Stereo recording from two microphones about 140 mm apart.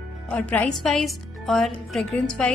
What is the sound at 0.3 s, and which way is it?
A woman's voice, 10° left (ahead or behind).